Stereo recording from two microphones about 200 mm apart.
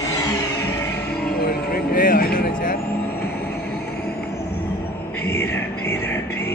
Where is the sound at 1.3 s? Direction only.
50° left (ahead or behind).